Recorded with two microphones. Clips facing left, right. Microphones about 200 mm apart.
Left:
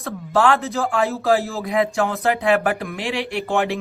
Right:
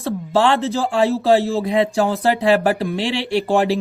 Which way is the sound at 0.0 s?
30° right (ahead or behind).